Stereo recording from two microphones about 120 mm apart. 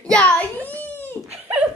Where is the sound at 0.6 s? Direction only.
15° left (ahead or behind).